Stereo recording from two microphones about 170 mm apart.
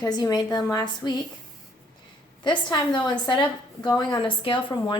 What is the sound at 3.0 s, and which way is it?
A woman's voice, 25° left (ahead or behind).